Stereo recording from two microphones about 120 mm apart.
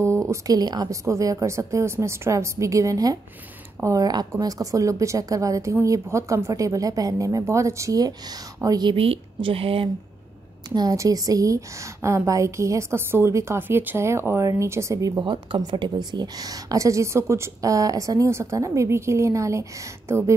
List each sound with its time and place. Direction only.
0.0 s a woman's voice: 25° right (ahead or behind)
8.9 s a woman's voice: 50° right (ahead or behind)
10.7 s a woman's voice: 30° right (ahead or behind)
15.2 s a woman's voice: 40° right (ahead or behind); by 20.2 s 25° right (ahead or behind)